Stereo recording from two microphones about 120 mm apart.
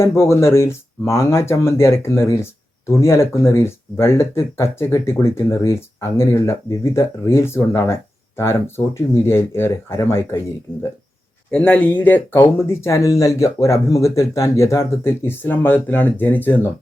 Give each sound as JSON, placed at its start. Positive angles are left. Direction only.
{"t": 0.2, "sound": "speech", "side_deg": 20}
{"t": 11.5, "sound": "speech", "side_deg": 10}